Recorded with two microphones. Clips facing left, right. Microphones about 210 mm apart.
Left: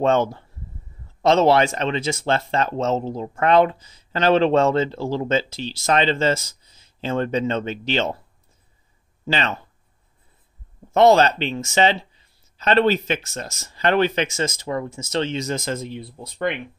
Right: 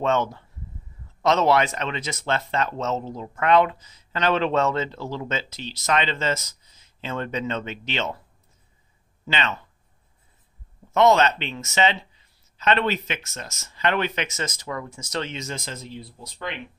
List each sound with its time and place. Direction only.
0.0 s speech: 30° left (ahead or behind)
9.2 s speech: 35° left (ahead or behind)
10.9 s speech: 35° left (ahead or behind); by 16.5 s 55° left (ahead or behind)